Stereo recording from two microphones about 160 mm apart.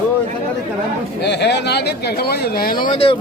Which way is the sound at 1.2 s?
90° left.